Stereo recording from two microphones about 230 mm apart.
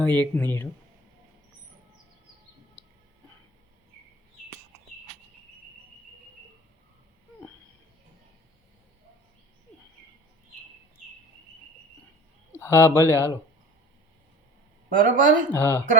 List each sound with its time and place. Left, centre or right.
0.0 s speech: centre
12.5 s speech: centre
14.8 s speech: right
15.5 s speech: centre